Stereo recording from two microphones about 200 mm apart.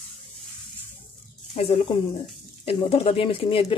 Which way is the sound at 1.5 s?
30° left (ahead or behind).